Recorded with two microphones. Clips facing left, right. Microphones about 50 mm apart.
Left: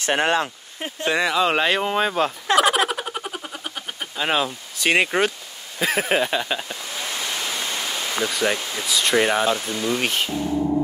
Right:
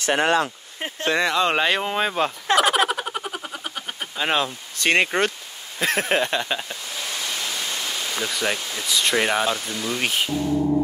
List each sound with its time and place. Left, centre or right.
0.0 s speech: left
1.0 s speech: centre
8.2 s speech: centre